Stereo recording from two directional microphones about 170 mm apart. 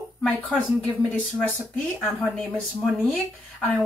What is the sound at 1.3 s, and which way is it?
Speech, 5° left (ahead or behind).